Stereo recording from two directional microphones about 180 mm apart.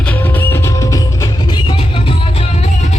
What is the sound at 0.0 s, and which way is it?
Music, 10° left (ahead or behind).